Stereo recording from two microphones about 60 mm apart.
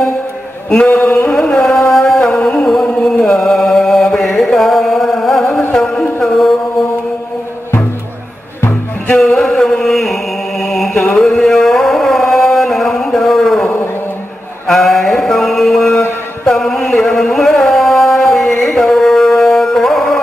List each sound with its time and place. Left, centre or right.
0.8 s a sound: left
1.3 s music: centre
3.2 s chant: centre
4.6 s music: centre
9.4 s chant: centre
11.1 s music: centre
14.7 s mantra: centre
16.5 s music: centre